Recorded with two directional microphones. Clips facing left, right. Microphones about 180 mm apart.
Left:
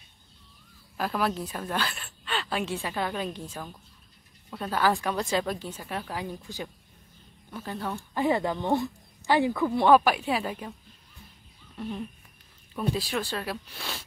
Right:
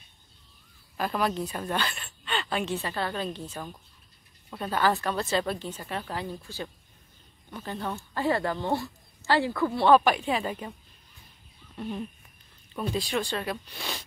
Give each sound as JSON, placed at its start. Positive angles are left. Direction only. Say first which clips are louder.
{"t": 0.9, "sound": "a woman's voice", "louder": "even", "side_deg": 5}
{"t": 7.5, "sound": "speech", "louder": "even", "side_deg": 5}
{"t": 8.1, "sound": "speech", "louder": "left 2 dB", "side_deg": 15}
{"t": 11.8, "sound": "speech", "louder": "even", "side_deg": 0}